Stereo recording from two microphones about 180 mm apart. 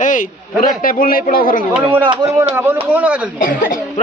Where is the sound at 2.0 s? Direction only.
20° right (ahead or behind).